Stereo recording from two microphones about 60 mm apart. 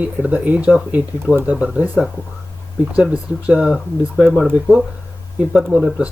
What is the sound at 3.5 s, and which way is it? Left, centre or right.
Speech, right.